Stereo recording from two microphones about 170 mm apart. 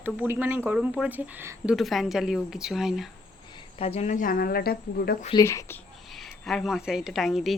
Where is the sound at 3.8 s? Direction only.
40° left (ahead or behind); by 5.2 s 65° left (ahead or behind).